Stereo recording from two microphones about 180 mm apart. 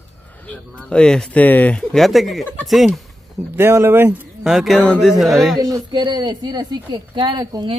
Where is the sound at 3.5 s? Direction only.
15° right (ahead or behind).